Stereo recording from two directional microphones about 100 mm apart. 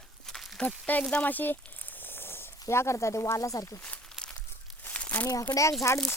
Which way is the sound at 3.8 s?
10° left (ahead or behind).